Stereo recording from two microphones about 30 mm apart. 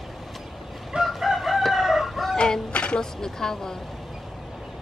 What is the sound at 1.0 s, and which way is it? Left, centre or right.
Chicken, centre.